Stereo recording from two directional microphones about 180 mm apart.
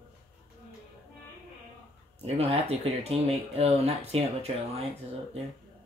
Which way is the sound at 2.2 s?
35° right (ahead or behind).